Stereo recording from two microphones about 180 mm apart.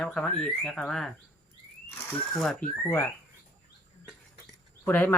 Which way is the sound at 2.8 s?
15° left (ahead or behind).